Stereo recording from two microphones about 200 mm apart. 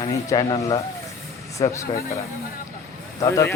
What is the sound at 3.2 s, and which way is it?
Speech, 15° left (ahead or behind).